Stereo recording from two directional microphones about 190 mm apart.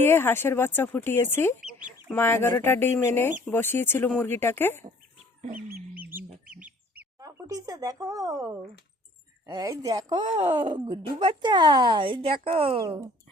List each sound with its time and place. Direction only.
0.0 s speech: 10° left (ahead or behind)
1.6 s chicken: centre (ahead or behind)
2.1 s speech: 10° left (ahead or behind)
5.4 s chicken: 45° right (ahead or behind)
5.9 s bird: 10° right (ahead or behind)
9.5 s speech: 20° right (ahead or behind)